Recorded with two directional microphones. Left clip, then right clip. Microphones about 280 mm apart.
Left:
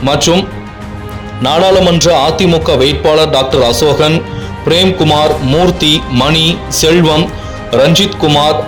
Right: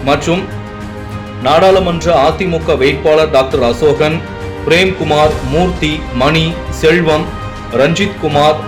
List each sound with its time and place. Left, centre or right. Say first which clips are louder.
0.0 s a man's voice: left 2 dB; left
1.4 s a man's voice: even; left